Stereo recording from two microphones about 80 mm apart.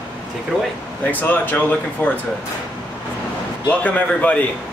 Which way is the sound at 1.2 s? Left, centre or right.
Left.